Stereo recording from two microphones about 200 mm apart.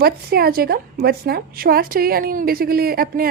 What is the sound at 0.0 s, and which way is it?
A woman's voice, 50° right (ahead or behind).